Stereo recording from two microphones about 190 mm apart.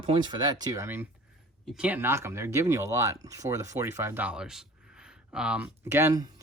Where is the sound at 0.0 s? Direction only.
25° right (ahead or behind).